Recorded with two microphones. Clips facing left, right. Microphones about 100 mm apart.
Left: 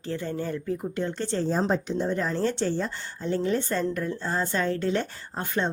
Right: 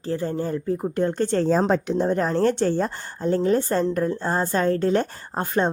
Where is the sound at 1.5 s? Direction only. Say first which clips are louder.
Right 5 dB; 90° right; by 5.6 s 40° right (ahead or behind).